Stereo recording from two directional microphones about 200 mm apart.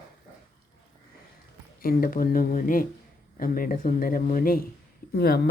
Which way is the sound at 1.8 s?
45° left (ahead or behind).